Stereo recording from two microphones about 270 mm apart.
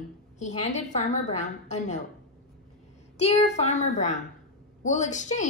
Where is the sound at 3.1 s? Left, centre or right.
Left.